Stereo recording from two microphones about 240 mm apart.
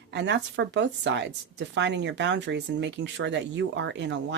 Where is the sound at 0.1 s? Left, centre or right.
Right.